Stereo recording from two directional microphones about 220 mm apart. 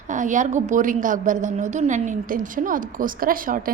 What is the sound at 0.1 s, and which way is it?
A woman's voice, 35° right (ahead or behind).